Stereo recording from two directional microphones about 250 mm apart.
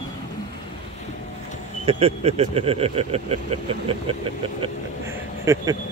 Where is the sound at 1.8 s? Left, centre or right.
Right.